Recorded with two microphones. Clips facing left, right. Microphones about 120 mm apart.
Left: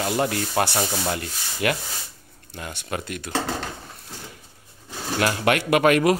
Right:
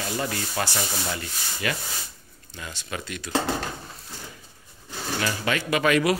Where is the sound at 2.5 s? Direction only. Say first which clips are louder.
Left 4 dB; 55° left (ahead or behind).